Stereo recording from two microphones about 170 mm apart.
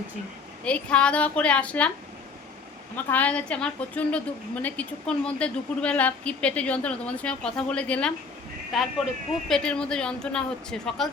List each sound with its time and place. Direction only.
0.6 s speech: 5° left (ahead or behind)
2.9 s a woman's voice: 10° left (ahead or behind)